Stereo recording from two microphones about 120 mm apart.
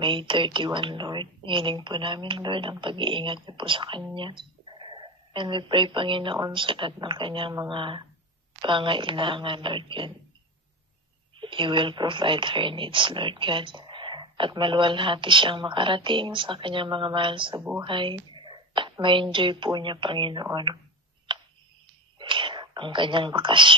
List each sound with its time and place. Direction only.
0.0 s a woman's voice: 45° right (ahead or behind)
11.3 s a woman's voice: 45° right (ahead or behind)
22.3 s speech: 40° right (ahead or behind)